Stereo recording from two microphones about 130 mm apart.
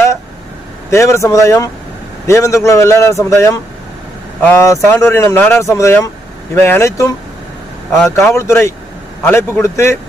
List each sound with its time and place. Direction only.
0.8 s speech: 20° left (ahead or behind)
7.9 s speech: centre (ahead or behind)
8.3 s speech: 20° left (ahead or behind)